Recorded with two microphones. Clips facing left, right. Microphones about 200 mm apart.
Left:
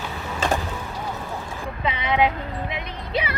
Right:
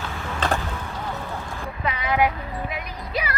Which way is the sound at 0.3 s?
10° left (ahead or behind).